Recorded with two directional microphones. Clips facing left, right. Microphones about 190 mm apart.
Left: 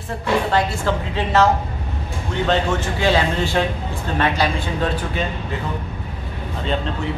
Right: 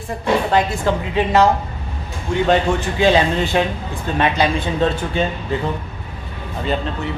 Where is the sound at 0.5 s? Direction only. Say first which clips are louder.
Right 2 dB; 15° right (ahead or behind).